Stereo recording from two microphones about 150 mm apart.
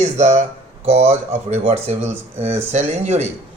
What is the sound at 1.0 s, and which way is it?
Speech, 15° right (ahead or behind).